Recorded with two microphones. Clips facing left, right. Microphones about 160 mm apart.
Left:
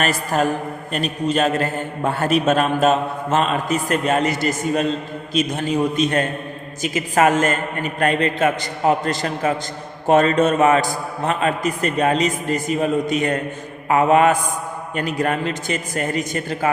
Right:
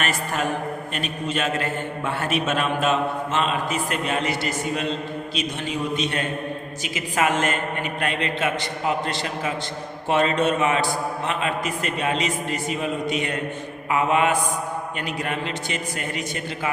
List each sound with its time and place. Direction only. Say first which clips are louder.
0.0 s a man's voice: left 6 dB; 40° left (ahead or behind)